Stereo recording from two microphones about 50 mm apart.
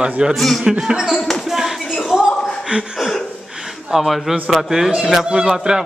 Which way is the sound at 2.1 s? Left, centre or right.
Centre.